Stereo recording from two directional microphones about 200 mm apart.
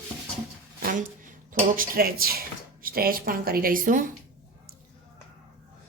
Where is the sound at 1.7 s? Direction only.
45° right (ahead or behind).